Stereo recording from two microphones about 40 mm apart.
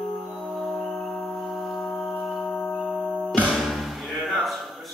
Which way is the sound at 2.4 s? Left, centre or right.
Left.